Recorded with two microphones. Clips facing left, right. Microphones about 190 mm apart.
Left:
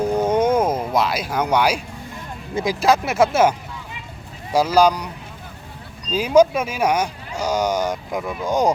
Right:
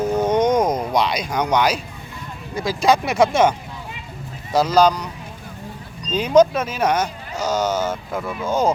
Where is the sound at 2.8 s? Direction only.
Centre (ahead or behind).